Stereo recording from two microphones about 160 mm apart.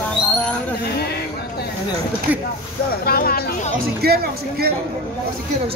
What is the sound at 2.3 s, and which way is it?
Speech, 10° right (ahead or behind).